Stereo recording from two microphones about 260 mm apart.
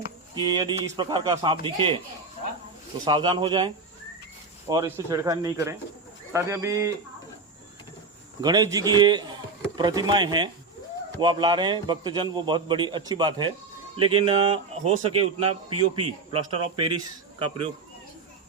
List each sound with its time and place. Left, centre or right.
0.3 s a man's voice: centre
3.0 s a man's voice: centre
4.7 s a man's voice: centre
8.4 s a man's voice: centre